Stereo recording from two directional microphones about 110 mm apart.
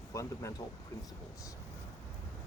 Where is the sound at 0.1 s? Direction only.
30° left (ahead or behind).